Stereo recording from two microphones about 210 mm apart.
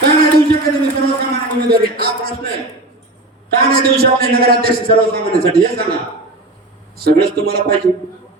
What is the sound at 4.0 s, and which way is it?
A man's voice, 45° right (ahead or behind).